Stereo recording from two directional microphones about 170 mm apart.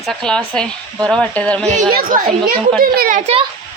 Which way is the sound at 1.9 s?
55° right (ahead or behind).